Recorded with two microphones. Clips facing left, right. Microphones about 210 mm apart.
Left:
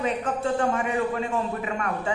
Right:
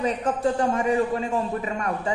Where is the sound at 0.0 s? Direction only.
35° right (ahead or behind).